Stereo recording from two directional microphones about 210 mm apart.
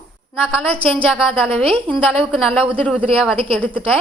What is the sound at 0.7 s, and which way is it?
Speech, 25° right (ahead or behind).